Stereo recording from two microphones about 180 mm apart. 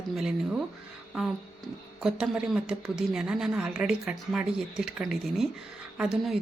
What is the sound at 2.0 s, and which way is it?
Speech, 5° right (ahead or behind).